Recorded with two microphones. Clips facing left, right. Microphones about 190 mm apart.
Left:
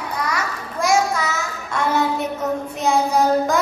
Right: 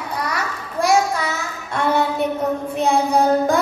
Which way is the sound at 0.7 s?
35° right (ahead or behind).